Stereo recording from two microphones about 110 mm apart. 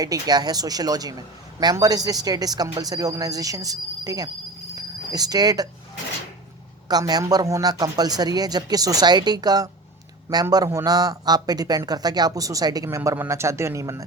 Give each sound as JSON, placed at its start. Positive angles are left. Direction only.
{"t": 0.0, "sound": "a man's voice", "side_deg": -35}
{"t": 4.7, "sound": "a sound", "side_deg": -35}
{"t": 6.8, "sound": "a man's voice", "side_deg": -35}